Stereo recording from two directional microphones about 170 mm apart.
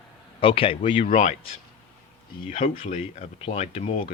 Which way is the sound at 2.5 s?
40° left (ahead or behind).